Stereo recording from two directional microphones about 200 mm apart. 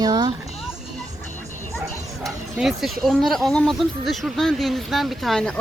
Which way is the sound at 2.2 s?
Centre (ahead or behind).